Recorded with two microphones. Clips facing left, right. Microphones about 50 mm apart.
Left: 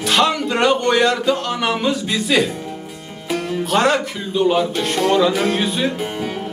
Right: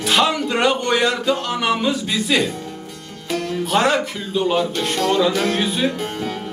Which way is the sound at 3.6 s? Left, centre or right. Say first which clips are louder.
Left 1 dB; centre.